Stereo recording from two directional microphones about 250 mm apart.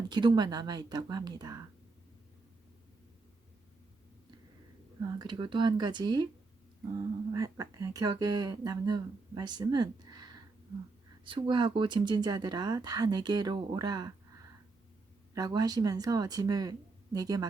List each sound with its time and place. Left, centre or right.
0.1 s speech: centre
5.0 s speech: centre
7.3 s speech: centre
15.4 s speech: centre